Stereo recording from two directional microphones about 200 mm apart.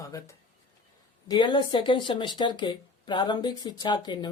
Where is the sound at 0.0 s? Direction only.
15° left (ahead or behind).